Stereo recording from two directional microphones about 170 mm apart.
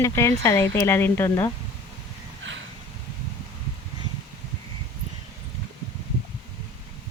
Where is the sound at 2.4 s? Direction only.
90° right.